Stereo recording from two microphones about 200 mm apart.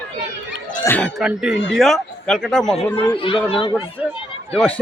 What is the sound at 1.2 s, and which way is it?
Speech, centre (ahead or behind).